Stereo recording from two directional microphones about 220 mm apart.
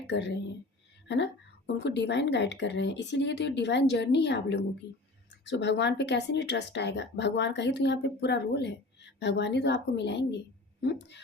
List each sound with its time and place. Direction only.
0.1 s speech: 50° left (ahead or behind)